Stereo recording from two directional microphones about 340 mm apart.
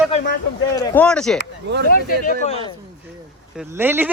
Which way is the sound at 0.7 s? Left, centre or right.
Centre.